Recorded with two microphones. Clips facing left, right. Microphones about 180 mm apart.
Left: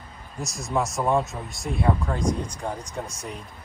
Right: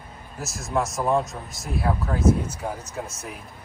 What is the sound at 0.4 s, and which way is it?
Speech, centre (ahead or behind).